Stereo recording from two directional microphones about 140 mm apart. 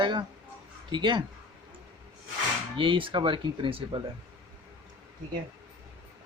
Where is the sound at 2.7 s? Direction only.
35° right (ahead or behind).